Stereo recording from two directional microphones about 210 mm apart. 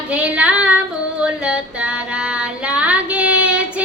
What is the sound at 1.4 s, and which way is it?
Female singing, 5° right (ahead or behind).